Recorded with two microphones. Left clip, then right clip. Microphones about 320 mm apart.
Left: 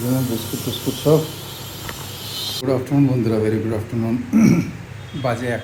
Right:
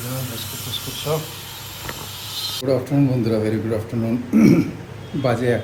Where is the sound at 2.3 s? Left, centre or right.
Centre.